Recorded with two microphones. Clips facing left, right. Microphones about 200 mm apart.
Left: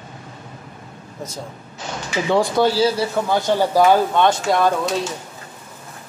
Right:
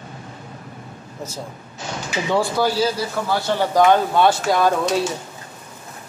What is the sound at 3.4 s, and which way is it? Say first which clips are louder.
Speech: left 1 dB; 15° left (ahead or behind).